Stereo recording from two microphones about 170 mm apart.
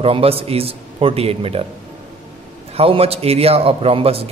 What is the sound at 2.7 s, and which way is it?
Speech, 35° right (ahead or behind).